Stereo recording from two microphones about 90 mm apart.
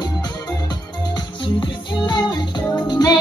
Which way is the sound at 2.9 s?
50° left (ahead or behind).